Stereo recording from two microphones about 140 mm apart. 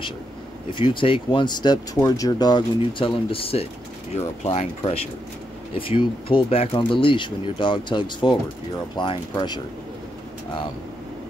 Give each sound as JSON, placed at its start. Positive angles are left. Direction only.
{"t": 0.7, "sound": "speech", "side_deg": 35}